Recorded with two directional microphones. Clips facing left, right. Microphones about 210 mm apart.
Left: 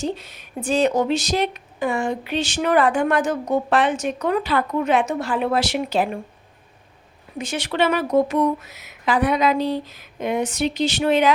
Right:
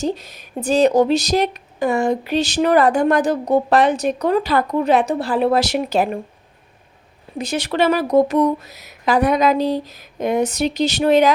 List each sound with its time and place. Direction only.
0.0 s speech: 40° right (ahead or behind)
7.3 s speech: 40° right (ahead or behind)